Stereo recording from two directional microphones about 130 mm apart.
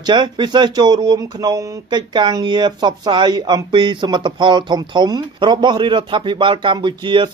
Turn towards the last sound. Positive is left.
turn(degrees=-35)  # may be behind; listen again after turning